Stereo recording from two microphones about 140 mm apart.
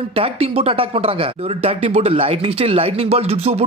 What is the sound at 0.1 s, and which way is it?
Speech, 40° right (ahead or behind).